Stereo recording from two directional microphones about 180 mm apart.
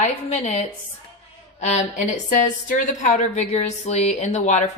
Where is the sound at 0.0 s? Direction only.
40° left (ahead or behind).